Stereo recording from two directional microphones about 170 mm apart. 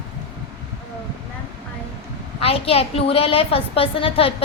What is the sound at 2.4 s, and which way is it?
A woman's voice, 35° left (ahead or behind).